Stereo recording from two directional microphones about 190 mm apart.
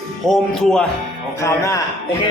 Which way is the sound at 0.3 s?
5° left (ahead or behind).